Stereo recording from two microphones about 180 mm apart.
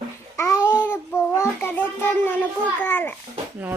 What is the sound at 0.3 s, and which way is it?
Babbling, 15° left (ahead or behind).